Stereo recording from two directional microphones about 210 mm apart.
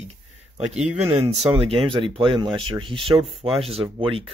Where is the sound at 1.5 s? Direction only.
15° right (ahead or behind).